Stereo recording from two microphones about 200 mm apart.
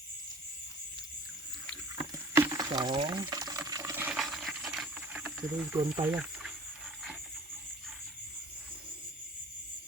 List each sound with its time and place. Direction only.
2.0 s boiling: 10° right (ahead or behind)
6.0 s speech: 10° right (ahead or behind)